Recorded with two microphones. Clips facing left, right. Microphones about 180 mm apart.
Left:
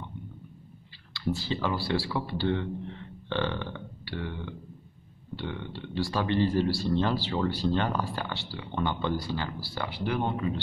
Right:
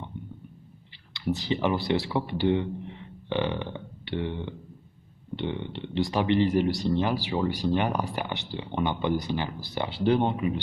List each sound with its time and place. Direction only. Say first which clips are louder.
1.1 s speech: right 3 dB; 20° right (ahead or behind)
10.3 s speech: right 2 dB; 15° right (ahead or behind)